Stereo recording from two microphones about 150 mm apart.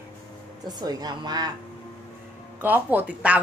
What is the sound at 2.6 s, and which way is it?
Speech, 10° right (ahead or behind).